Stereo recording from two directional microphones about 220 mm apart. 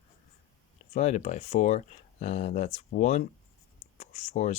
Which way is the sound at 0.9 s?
30° left (ahead or behind).